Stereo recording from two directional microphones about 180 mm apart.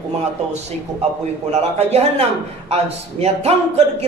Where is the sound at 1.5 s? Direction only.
35° right (ahead or behind).